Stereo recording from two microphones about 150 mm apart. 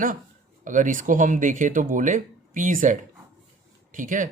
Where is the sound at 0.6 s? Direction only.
60° right (ahead or behind).